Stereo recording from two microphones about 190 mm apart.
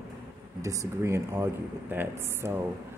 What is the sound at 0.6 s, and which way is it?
Speech, 15° right (ahead or behind).